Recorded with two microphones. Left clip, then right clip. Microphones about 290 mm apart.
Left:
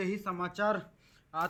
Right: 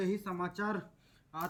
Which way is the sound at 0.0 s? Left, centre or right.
Centre.